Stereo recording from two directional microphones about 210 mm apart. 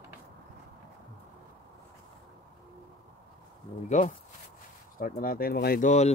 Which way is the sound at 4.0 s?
35° left (ahead or behind).